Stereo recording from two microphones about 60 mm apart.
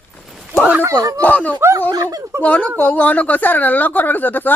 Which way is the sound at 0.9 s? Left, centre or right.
Right.